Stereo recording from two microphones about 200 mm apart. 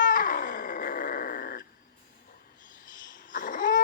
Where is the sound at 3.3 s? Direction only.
40° left (ahead or behind).